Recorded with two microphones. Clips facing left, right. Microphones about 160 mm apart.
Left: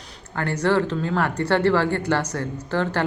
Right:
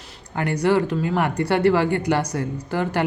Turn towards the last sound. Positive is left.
turn(degrees=-10)  # may be behind; listen again after turning